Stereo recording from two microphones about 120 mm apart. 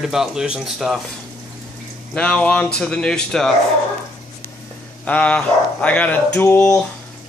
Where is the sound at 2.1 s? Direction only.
10° left (ahead or behind).